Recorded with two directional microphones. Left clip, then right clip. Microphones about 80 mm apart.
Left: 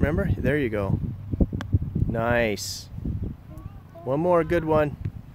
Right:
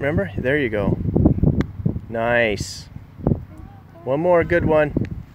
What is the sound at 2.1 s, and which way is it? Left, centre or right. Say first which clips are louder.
Speech: right 5 dB; centre.